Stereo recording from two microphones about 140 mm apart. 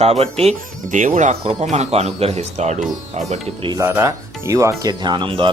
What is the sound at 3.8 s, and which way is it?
Speech, 20° right (ahead or behind).